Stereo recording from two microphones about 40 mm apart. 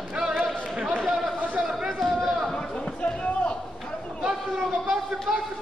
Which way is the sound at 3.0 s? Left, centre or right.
Left.